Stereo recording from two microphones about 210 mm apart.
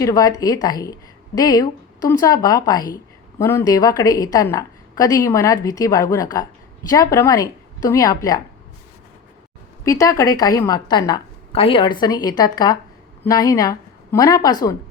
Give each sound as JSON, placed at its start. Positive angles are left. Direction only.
{"t": 0.0, "sound": "speech", "side_deg": 15}
{"t": 9.8, "sound": "a woman's voice", "side_deg": 15}